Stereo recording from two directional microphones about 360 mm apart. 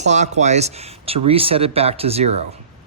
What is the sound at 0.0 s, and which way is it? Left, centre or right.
Speech, centre.